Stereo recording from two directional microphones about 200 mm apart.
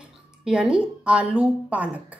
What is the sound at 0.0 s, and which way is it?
A woman's voice, 5° right (ahead or behind).